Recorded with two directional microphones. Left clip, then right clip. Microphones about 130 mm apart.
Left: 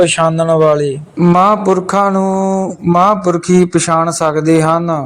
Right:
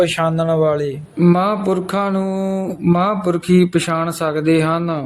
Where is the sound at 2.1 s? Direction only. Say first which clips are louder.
Left 7 dB; centre (ahead or behind).